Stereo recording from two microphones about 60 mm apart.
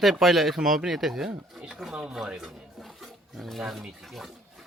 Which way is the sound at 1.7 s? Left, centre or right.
Centre.